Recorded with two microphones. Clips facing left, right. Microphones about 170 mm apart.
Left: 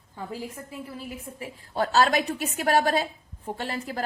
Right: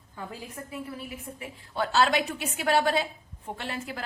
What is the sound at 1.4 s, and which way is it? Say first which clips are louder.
A woman's voice: left 3 dB; 40° left (ahead or behind).